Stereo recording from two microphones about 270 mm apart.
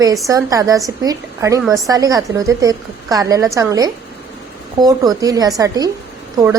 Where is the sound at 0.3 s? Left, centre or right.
Centre.